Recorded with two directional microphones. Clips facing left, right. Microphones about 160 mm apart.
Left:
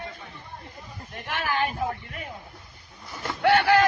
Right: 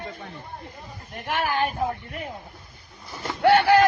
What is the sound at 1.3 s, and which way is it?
Speech, 45° right (ahead or behind).